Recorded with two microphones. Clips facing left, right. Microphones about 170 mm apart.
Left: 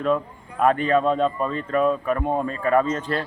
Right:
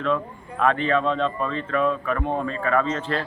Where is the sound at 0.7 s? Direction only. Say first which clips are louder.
Left 2 dB; 40° left (ahead or behind).